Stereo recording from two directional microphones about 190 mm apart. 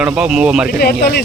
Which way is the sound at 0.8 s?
55° left (ahead or behind).